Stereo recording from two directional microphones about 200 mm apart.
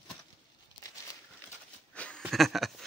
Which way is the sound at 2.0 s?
5° left (ahead or behind).